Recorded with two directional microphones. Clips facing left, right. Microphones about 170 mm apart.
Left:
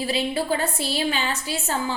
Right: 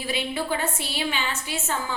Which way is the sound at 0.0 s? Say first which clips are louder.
Left 4 dB; 35° left (ahead or behind).